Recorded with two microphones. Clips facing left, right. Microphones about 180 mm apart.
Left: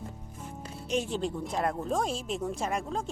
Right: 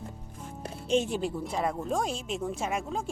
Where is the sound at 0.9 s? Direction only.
25° right (ahead or behind).